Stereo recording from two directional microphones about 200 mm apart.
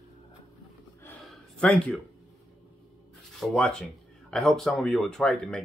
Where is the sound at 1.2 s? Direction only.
5° left (ahead or behind).